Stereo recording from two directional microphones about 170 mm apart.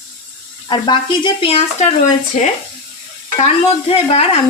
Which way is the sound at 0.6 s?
30° left (ahead or behind).